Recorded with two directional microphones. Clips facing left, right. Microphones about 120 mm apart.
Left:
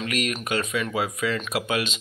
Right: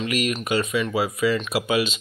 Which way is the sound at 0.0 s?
Centre (ahead or behind).